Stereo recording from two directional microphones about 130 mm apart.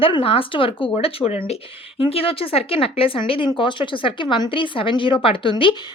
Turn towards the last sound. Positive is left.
turn(degrees=40)  # may be behind; listen again after turning